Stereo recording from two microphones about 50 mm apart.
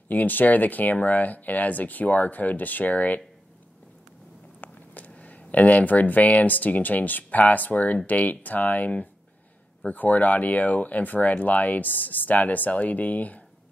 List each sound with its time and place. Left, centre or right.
0.1 s speech: left
4.6 s speech: left